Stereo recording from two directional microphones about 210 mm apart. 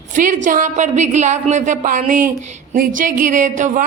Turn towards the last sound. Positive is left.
turn(degrees=-35)  # may be behind; listen again after turning